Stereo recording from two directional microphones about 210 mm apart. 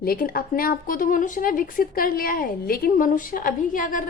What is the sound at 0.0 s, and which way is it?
A woman's voice, 45° left (ahead or behind).